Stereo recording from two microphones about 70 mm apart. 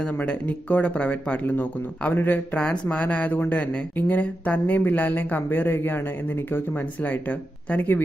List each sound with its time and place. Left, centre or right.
0.0 s speech: centre
1.5 s speech: left